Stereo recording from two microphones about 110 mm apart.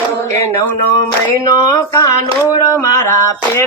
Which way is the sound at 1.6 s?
35° left (ahead or behind).